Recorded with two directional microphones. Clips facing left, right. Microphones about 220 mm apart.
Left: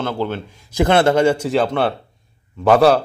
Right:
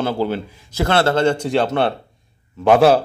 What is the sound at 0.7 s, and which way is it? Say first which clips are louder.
A man's voice: left 3 dB; 15° left (ahead or behind).